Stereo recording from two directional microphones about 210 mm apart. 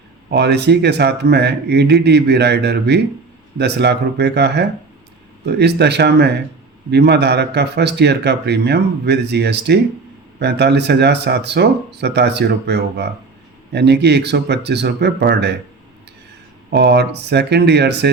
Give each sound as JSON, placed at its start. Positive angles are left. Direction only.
{"t": 0.3, "sound": "speech", "side_deg": -50}
{"t": 16.7, "sound": "speech", "side_deg": -50}